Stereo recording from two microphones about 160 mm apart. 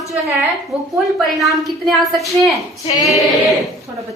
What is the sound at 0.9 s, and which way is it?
A woman's voice, centre (ahead or behind).